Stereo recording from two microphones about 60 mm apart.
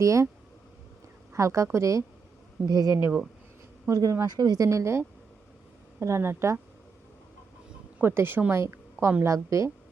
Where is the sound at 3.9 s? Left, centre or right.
Right.